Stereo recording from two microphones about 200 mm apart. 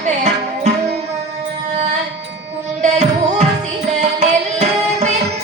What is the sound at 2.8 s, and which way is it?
Music, 35° right (ahead or behind).